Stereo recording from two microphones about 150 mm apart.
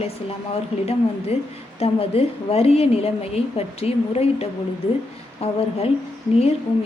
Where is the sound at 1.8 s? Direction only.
40° left (ahead or behind).